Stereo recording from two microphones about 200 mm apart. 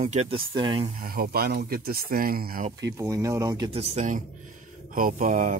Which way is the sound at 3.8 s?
35° right (ahead or behind).